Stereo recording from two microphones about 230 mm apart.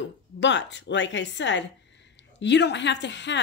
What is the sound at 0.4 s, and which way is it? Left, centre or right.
Speech, left.